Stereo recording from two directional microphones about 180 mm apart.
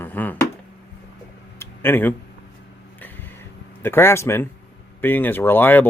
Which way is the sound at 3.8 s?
15° left (ahead or behind).